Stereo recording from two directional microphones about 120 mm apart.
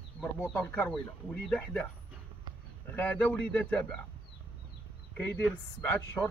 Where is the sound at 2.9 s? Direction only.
10° left (ahead or behind).